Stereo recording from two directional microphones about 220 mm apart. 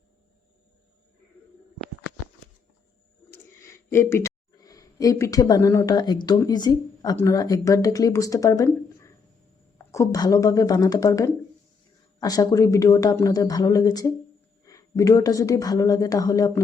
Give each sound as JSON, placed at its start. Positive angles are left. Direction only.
{"t": 3.3, "sound": "speech", "side_deg": 10}